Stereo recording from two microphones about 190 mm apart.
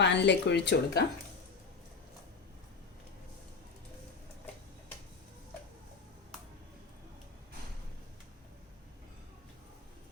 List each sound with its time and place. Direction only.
0.0 s speech: 65° left (ahead or behind)